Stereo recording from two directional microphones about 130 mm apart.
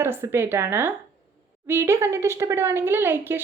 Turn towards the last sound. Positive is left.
turn(degrees=-15)  # may be behind; listen again after turning